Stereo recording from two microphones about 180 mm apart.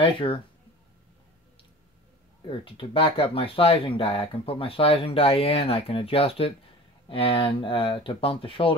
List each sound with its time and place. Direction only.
0.0 s speech: 30° left (ahead or behind)
2.4 s speech: 30° left (ahead or behind)